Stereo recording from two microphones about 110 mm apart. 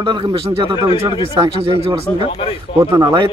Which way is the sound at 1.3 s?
45° right (ahead or behind).